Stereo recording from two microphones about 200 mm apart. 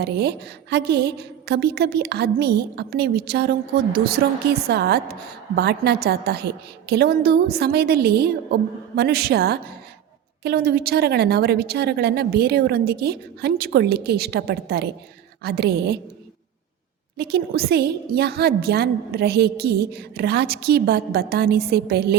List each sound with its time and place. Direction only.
0.0 s a woman's voice: 55° right (ahead or behind)
17.2 s a woman's voice: 55° right (ahead or behind)